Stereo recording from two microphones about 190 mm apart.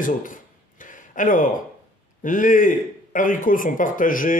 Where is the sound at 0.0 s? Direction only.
45° left (ahead or behind).